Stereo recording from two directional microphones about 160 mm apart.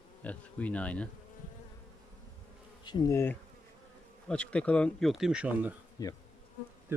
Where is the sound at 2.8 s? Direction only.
25° left (ahead or behind).